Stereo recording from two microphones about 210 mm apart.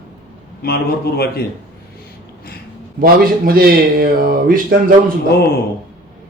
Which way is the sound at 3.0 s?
45° right (ahead or behind).